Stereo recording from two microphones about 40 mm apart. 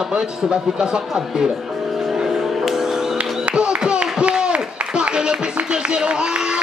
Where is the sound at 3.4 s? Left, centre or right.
Right.